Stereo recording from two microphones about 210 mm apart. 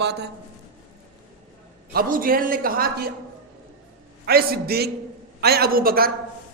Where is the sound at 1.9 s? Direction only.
40° right (ahead or behind).